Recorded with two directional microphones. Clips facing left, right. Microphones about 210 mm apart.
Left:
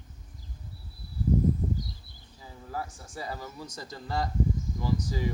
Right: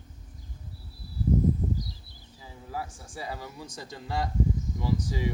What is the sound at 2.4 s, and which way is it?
Speech, 5° right (ahead or behind).